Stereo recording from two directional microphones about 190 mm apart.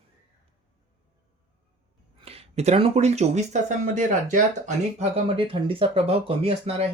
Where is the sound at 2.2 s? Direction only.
30° right (ahead or behind).